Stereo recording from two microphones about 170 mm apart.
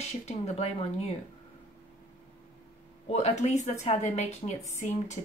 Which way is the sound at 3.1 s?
40° left (ahead or behind).